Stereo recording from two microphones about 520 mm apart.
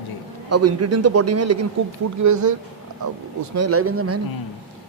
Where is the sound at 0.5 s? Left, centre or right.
Right.